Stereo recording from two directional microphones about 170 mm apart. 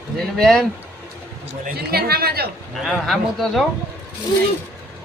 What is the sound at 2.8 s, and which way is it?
Speech, centre (ahead or behind).